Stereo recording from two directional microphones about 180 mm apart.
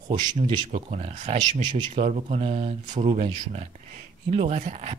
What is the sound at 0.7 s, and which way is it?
Speech, 35° right (ahead or behind).